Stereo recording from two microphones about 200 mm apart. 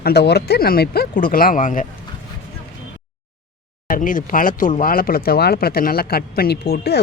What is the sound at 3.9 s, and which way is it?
Speech, 40° left (ahead or behind).